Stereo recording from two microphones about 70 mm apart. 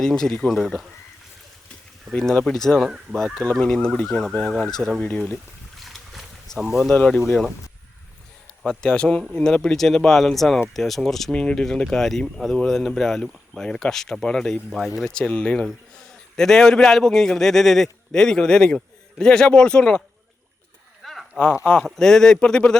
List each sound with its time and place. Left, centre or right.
0.0 s speech: centre
2.1 s speech: centre
4.9 s a sound: centre
8.8 s speech: centre
15.0 s speech: centre
16.3 s speech: centre
21.0 s a sound: centre
21.8 s speech: centre